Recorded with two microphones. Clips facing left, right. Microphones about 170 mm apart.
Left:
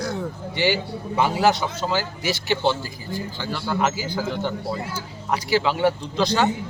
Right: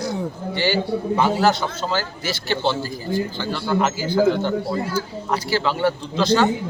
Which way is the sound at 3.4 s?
5° left (ahead or behind).